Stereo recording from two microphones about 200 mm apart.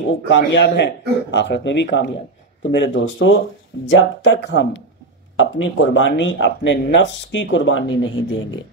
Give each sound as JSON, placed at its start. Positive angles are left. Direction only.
{"t": 0.3, "sound": "a man's voice", "side_deg": 60}